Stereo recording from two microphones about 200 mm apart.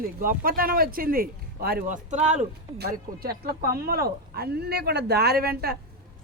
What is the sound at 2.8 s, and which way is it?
Speech, 50° right (ahead or behind).